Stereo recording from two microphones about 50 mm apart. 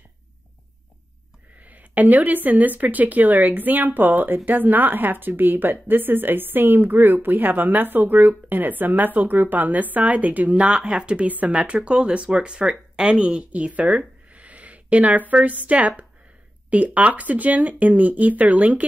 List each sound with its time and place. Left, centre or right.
1.6 s a woman's voice: right
11.2 s a woman's voice: right